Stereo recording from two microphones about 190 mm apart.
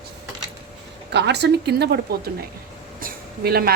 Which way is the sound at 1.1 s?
65° right (ahead or behind).